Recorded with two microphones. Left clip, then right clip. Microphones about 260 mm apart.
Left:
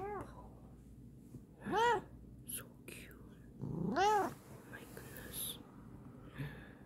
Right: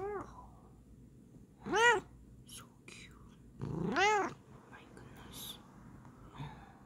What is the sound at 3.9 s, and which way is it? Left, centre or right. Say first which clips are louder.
Cat: right 2 dB; centre.